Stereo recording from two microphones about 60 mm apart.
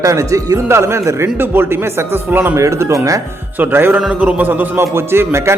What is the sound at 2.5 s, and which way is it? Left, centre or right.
Speech, right.